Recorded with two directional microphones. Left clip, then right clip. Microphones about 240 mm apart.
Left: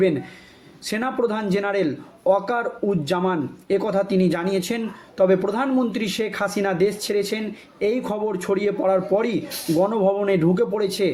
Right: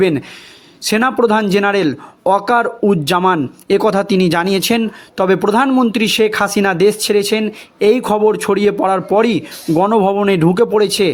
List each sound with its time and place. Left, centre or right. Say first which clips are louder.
0.9 s speech: right 10 dB; right